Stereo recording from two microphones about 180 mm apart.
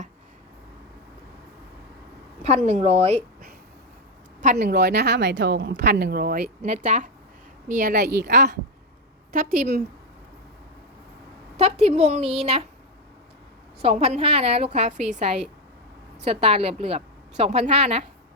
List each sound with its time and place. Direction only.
2.4 s a woman's voice: 40° right (ahead or behind)
4.5 s speech: 60° right (ahead or behind)
6.7 s a woman's voice: 45° right (ahead or behind); by 8.5 s 65° right (ahead or behind)
9.3 s a woman's voice: 50° right (ahead or behind)
11.5 s a woman's voice: 35° right (ahead or behind)
13.8 s a woman's voice: 35° right (ahead or behind)
16.2 s a woman's voice: 35° right (ahead or behind)